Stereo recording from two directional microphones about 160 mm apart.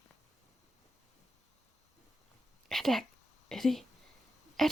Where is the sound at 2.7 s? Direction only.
Centre (ahead or behind).